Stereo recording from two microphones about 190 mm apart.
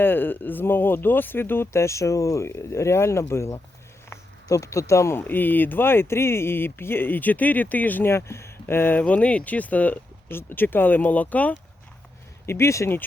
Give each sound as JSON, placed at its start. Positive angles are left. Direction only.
{"t": 0.0, "sound": "speech", "side_deg": 10}